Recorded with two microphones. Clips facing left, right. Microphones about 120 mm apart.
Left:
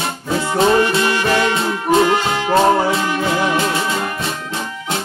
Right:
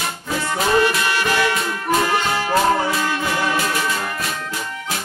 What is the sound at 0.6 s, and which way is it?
Music, 25° left (ahead or behind).